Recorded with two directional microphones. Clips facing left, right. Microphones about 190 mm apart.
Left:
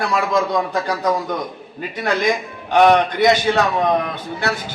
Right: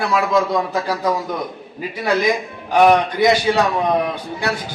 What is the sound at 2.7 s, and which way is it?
A man's voice, 5° right (ahead or behind).